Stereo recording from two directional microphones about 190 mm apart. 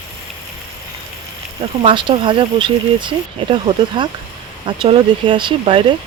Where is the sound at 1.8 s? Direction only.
25° right (ahead or behind).